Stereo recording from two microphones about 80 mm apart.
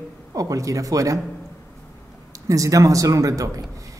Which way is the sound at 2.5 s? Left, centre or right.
Right.